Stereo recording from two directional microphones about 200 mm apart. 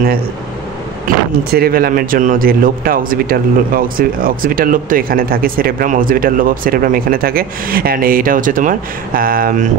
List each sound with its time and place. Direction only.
1.0 s speech: 50° right (ahead or behind)